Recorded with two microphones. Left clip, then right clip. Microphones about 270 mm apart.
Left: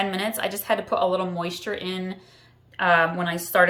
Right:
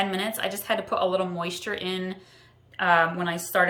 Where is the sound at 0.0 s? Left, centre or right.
Centre.